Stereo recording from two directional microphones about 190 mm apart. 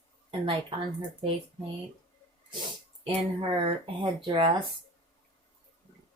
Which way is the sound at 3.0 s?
30° right (ahead or behind).